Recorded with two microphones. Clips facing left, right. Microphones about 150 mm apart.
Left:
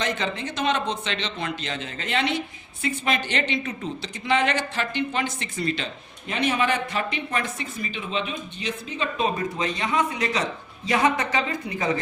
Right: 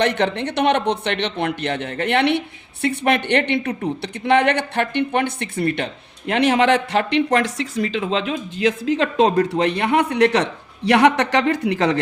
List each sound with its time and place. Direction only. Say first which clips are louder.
0.0 s a woman's voice: right 8 dB; 65° right (ahead or behind)